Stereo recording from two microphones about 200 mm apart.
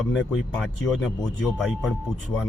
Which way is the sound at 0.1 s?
Centre (ahead or behind).